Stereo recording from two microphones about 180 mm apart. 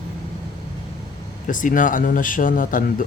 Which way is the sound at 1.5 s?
45° left (ahead or behind).